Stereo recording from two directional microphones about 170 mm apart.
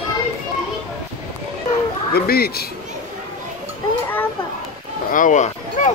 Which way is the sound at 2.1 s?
65° left (ahead or behind).